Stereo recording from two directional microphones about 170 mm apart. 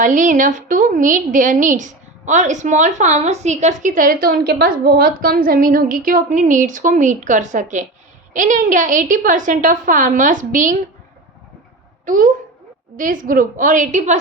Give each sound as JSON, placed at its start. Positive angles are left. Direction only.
{"t": 0.0, "sound": "a woman's voice", "side_deg": -50}
{"t": 12.0, "sound": "a woman's voice", "side_deg": -50}